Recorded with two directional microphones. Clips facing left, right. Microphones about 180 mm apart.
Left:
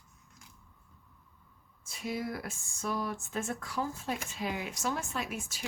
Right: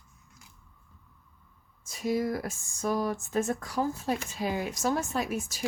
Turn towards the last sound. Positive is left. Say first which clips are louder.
# right 6 dB
turn(degrees=-40)  # may be behind; listen again after turning